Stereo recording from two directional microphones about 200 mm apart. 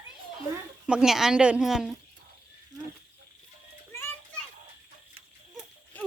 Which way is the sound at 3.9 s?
10° left (ahead or behind).